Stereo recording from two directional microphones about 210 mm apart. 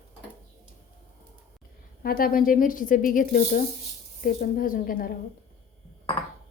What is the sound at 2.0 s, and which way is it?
Speech, 45° left (ahead or behind).